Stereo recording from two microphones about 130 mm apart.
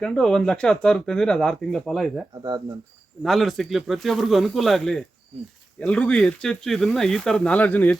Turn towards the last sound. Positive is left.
turn(degrees=10)  # may be behind; listen again after turning